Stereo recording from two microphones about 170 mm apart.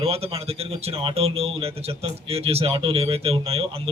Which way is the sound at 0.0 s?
35° right (ahead or behind).